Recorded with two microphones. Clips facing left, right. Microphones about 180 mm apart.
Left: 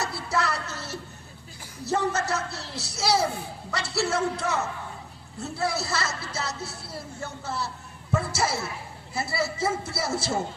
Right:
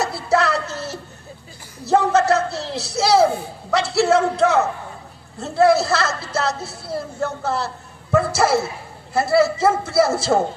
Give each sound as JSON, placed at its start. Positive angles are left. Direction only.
{"t": 0.0, "sound": "music", "side_deg": -85}
{"t": 1.9, "sound": "a sound", "side_deg": -90}
{"t": 5.4, "sound": "a man's voice", "side_deg": -90}